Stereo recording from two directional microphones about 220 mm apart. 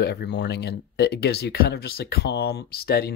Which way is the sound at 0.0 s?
45° left (ahead or behind).